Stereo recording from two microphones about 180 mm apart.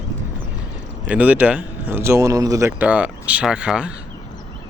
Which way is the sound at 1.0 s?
5° right (ahead or behind).